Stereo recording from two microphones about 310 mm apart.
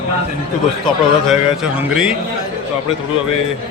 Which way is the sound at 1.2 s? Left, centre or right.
Centre.